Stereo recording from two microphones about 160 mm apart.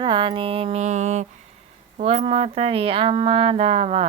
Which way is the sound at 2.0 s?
40° right (ahead or behind).